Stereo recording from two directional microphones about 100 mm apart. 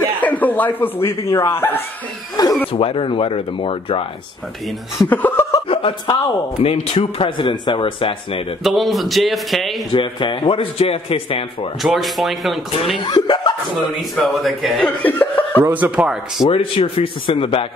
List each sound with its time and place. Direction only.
0.0 s speech: 15° left (ahead or behind)
2.4 s speech: 40° left (ahead or behind)
2.7 s speech: 65° left (ahead or behind)
5.1 s chuckle: 20° left (ahead or behind)
5.7 s speech: 65° left (ahead or behind)
8.6 s speech: centre (ahead or behind)
9.9 s speech: 55° left (ahead or behind)
11.8 s speech: centre (ahead or behind)
12.9 s speech: 50° left (ahead or behind)
14.1 s speech: centre (ahead or behind)
15.0 s chuckle: 15° left (ahead or behind)
15.6 s speech: 15° right (ahead or behind)
16.0 s speech: 5° right (ahead or behind)
16.4 s speech: 70° left (ahead or behind)